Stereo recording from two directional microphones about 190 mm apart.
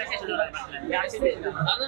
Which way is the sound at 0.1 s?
20° right (ahead or behind).